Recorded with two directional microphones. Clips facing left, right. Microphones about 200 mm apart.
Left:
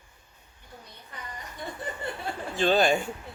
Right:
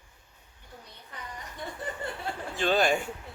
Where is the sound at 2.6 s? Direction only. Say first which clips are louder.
Left 3 dB; 30° left (ahead or behind).